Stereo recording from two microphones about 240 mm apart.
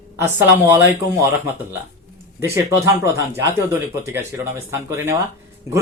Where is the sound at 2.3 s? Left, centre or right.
Centre.